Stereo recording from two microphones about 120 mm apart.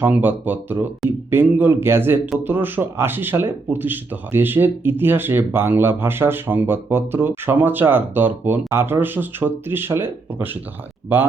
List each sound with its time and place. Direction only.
0.0 s speech: 15° right (ahead or behind)